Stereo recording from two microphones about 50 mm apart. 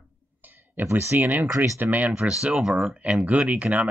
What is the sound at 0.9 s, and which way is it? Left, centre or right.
Speech, right.